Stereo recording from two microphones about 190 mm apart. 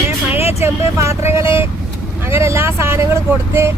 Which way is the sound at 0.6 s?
15° right (ahead or behind).